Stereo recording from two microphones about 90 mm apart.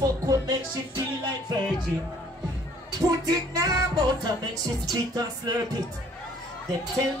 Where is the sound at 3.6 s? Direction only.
45° right (ahead or behind).